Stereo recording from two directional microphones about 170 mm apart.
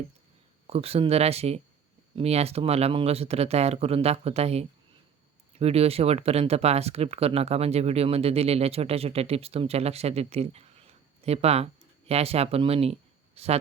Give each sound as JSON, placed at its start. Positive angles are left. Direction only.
{"t": 0.7, "sound": "speech", "side_deg": -35}